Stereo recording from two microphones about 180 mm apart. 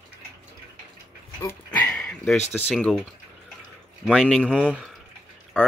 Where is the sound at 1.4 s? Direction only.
15° left (ahead or behind).